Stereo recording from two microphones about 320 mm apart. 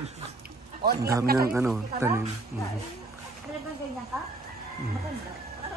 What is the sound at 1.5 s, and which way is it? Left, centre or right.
Speech, centre.